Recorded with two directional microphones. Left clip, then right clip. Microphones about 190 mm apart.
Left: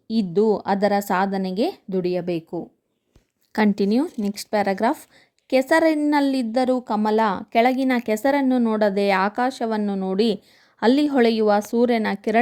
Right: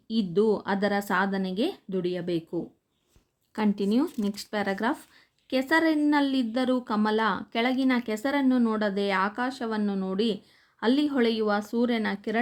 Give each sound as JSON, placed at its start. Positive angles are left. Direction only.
{"t": 0.1, "sound": "speech", "side_deg": 30}
{"t": 3.5, "sound": "speech", "side_deg": 35}